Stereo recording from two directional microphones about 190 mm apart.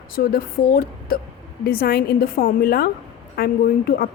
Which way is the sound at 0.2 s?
50° left (ahead or behind).